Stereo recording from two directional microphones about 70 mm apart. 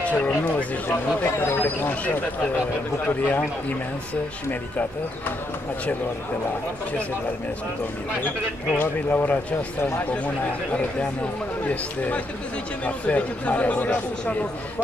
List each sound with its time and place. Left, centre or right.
0.0 s speech: left
0.8 s speech: left
8.7 s speech: left